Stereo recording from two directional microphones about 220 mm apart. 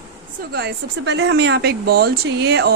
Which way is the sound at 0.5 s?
50° right (ahead or behind).